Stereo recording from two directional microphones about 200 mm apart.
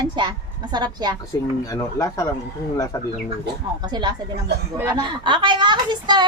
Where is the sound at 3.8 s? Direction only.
20° right (ahead or behind).